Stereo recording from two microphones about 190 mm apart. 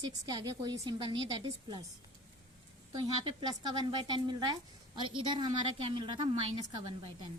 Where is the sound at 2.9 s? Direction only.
25° right (ahead or behind).